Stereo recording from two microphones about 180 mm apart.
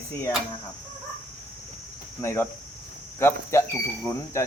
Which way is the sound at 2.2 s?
15° left (ahead or behind).